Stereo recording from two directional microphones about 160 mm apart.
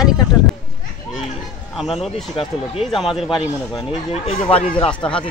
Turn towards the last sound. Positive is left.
turn(degrees=35)  # may be behind; listen again after turning